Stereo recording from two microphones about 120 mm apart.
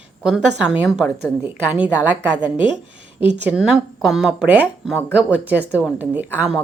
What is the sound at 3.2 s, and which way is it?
Speech, 10° right (ahead or behind).